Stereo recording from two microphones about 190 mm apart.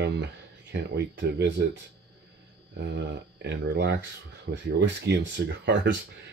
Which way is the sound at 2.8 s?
65° right (ahead or behind).